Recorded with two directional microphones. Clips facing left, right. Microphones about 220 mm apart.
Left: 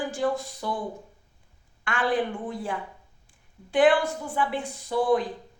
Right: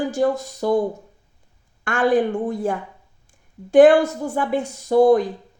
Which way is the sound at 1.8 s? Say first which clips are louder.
Right 8 dB; 45° right (ahead or behind).